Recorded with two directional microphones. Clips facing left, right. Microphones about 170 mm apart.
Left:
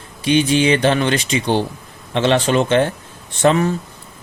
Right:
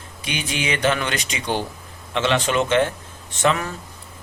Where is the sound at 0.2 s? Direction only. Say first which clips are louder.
Left 13 dB; 30° left (ahead or behind).